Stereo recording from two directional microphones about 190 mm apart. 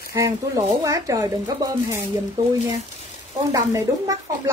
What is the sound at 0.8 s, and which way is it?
Speech, 20° right (ahead or behind).